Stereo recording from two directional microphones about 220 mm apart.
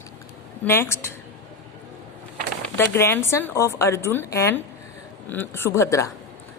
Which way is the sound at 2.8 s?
10° left (ahead or behind).